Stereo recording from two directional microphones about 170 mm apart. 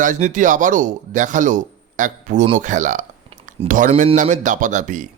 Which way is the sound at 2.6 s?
45° right (ahead or behind).